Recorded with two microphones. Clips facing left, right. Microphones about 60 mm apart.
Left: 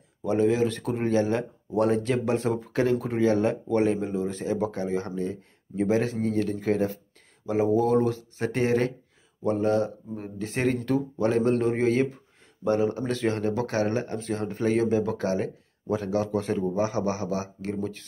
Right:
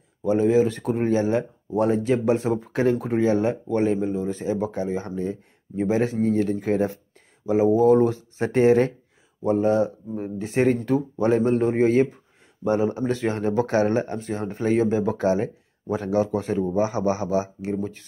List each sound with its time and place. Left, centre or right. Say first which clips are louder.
0.2 s speech: right 4 dB; centre
1.7 s speech: right 2 dB; centre
3.4 s speech: right 1 dB; centre
8.0 s speech: right 4 dB; right
9.4 s speech: right 4 dB; centre
16.7 s speech: right 4 dB; right